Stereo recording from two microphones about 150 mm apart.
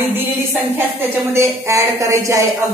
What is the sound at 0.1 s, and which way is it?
A woman's voice, 15° right (ahead or behind).